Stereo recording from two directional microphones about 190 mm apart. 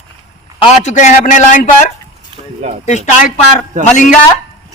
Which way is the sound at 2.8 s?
40° left (ahead or behind).